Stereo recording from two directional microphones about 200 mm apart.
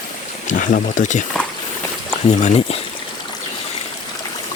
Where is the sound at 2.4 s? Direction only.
35° left (ahead or behind).